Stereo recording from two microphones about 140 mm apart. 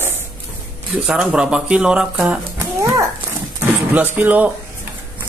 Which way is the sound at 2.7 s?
20° right (ahead or behind).